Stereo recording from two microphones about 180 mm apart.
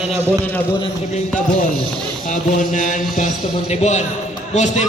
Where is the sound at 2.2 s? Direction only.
45° left (ahead or behind).